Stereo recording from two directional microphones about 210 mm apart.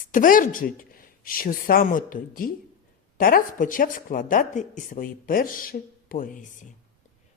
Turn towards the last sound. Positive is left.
turn(degrees=40)  # may be behind; listen again after turning